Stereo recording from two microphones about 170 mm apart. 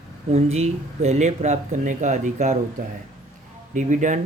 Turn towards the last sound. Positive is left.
turn(degrees=-45)  # may be behind; listen again after turning